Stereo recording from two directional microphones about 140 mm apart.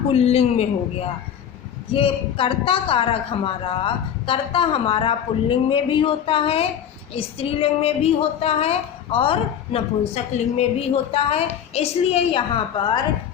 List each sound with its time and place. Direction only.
0.1 s a woman's voice: 45° left (ahead or behind)
11.1 s a woman's voice: 45° left (ahead or behind)